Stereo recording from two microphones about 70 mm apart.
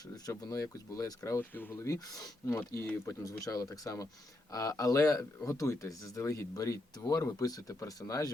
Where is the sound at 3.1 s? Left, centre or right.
Left.